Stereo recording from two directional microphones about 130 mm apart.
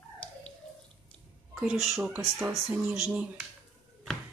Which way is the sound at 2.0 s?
15° right (ahead or behind).